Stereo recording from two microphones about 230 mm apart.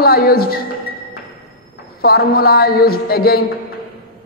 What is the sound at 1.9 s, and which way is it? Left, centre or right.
A man's voice, left.